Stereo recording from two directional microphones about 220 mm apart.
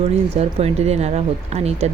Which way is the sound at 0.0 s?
30° right (ahead or behind).